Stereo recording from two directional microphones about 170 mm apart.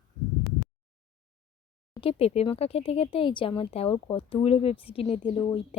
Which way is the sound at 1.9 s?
30° left (ahead or behind).